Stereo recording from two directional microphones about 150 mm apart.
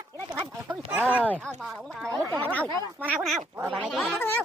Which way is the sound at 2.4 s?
10° left (ahead or behind).